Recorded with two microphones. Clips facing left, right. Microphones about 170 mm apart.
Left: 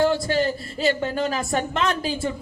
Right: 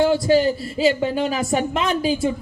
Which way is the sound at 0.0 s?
5° right (ahead or behind).